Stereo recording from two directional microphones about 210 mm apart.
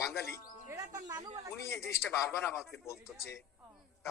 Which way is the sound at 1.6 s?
15° left (ahead or behind).